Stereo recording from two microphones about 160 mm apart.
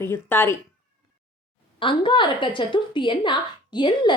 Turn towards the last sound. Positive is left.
turn(degrees=30)  # may be behind; listen again after turning